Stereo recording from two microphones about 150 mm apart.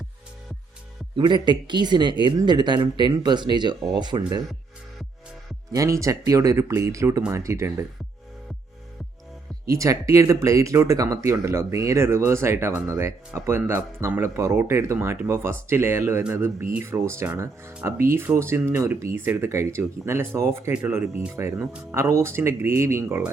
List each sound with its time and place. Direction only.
1.1 s speech: 30° right (ahead or behind)
5.7 s speech: 20° right (ahead or behind)
9.6 s speech: 20° right (ahead or behind)